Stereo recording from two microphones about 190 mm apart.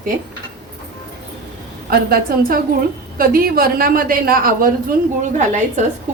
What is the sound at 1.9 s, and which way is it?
A woman's voice, 50° right (ahead or behind).